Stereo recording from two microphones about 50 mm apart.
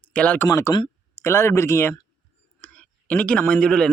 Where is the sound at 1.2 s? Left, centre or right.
Left.